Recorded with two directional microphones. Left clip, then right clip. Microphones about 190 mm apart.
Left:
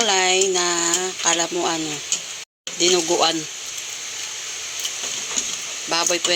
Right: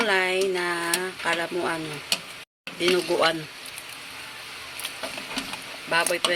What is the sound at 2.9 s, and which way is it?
Speech, 5° left (ahead or behind).